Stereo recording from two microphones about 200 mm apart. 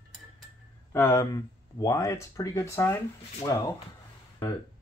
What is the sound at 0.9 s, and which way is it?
Speech, 15° left (ahead or behind).